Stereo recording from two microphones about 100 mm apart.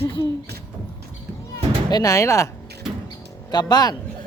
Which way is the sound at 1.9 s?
35° left (ahead or behind).